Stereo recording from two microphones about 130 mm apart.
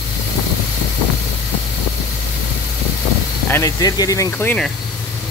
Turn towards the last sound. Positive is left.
turn(degrees=15)  # may be behind; listen again after turning